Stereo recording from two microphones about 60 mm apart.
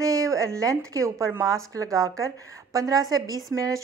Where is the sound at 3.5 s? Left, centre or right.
Right.